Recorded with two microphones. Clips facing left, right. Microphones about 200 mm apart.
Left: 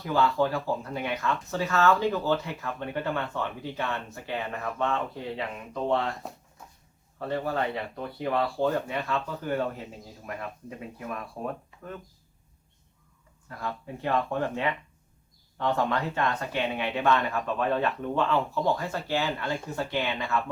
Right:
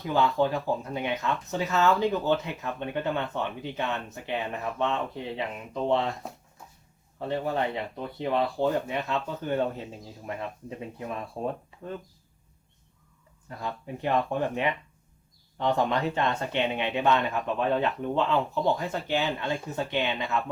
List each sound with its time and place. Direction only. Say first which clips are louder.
0.0 s speech: even; 20° right (ahead or behind)
7.2 s speech: right 1 dB; 20° right (ahead or behind)
13.5 s speech: right 1 dB; 20° right (ahead or behind)